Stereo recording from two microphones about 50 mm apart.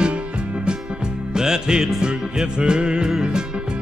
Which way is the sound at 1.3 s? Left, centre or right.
Centre.